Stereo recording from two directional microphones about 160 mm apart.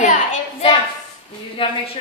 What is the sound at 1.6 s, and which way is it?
Speech, 35° left (ahead or behind).